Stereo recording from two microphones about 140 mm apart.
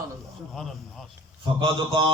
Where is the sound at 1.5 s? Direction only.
35° right (ahead or behind).